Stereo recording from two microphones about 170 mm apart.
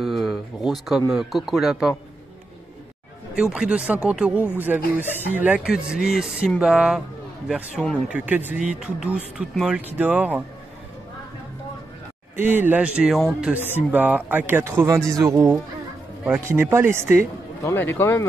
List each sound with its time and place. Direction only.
0.0 s speech: centre (ahead or behind)
3.3 s speech: 5° right (ahead or behind)
12.4 s speech: 10° right (ahead or behind)
17.6 s speech: 15° left (ahead or behind)